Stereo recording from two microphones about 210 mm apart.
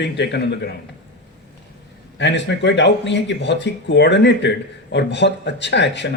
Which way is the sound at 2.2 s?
55° left (ahead or behind).